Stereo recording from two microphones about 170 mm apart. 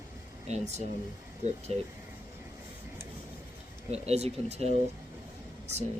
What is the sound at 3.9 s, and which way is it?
Speech, 40° right (ahead or behind).